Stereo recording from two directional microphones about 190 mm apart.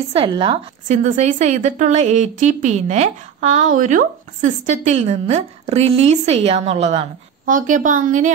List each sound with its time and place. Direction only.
0.1 s a woman's voice: 30° right (ahead or behind)
0.8 s a woman's voice: 40° right (ahead or behind)